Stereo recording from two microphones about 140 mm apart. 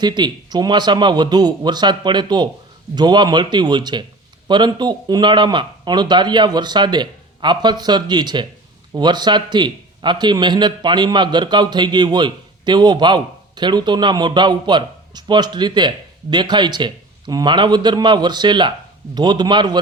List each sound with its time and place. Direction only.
0.0 s a man's voice: 30° right (ahead or behind)